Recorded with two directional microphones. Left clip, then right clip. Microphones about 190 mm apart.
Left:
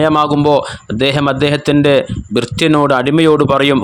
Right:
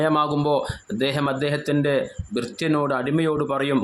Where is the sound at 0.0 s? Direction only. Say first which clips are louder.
Left 9 dB; 40° left (ahead or behind).